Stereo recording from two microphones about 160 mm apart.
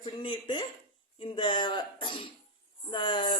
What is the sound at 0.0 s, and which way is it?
Speech, 30° left (ahead or behind).